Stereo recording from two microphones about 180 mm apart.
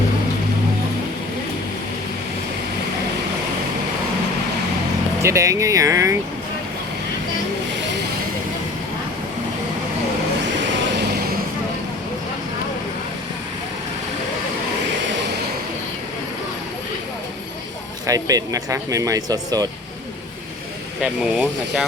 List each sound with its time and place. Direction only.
5.2 s speech: 15° right (ahead or behind)
18.0 s speech: 20° right (ahead or behind)
21.0 s speech: 5° right (ahead or behind)